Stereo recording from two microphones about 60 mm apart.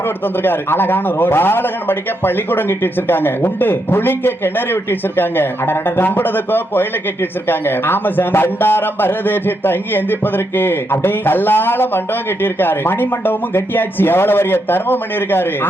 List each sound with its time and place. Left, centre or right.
0.4 s a man's voice: left